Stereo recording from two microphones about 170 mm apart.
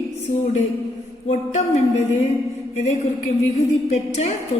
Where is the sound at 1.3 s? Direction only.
40° left (ahead or behind).